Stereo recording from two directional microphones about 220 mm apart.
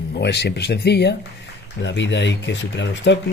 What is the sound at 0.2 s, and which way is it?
Speech, 50° left (ahead or behind).